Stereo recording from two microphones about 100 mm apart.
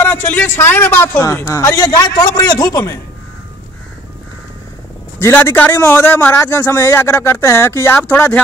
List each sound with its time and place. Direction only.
0.0 s a man's voice: 20° left (ahead or behind)
1.2 s a man's voice: 35° left (ahead or behind)
1.9 s a man's voice: 45° left (ahead or behind)
5.2 s a man's voice: 25° left (ahead or behind)